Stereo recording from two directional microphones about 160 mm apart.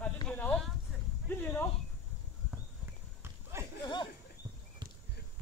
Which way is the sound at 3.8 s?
30° left (ahead or behind).